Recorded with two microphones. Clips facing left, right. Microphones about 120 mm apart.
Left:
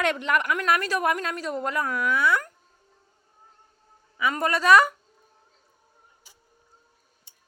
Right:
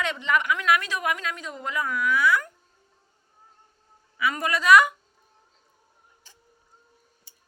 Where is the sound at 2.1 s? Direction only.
30° left (ahead or behind).